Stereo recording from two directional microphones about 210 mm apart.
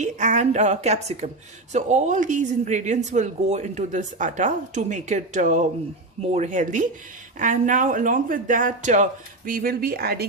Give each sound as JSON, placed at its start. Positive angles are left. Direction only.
{"t": 0.0, "sound": "speech", "side_deg": -35}